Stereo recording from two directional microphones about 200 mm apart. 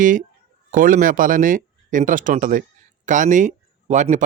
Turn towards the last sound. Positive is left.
turn(degrees=-35)  # may be behind; listen again after turning